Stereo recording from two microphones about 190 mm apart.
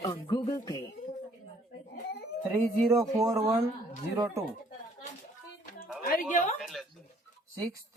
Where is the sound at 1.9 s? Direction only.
55° left (ahead or behind).